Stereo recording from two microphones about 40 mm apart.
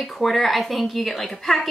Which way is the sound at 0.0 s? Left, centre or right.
Centre.